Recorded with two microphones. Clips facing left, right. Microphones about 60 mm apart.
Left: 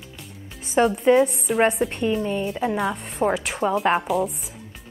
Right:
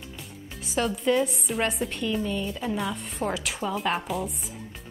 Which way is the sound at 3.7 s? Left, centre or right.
Centre.